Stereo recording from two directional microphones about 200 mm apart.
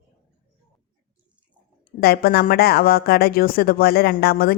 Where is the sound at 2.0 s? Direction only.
50° left (ahead or behind).